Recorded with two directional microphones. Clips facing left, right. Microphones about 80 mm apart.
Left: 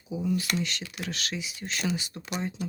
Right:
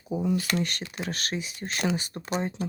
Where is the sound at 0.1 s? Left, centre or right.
Right.